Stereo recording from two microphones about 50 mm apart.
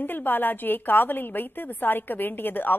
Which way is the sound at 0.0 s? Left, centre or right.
Left.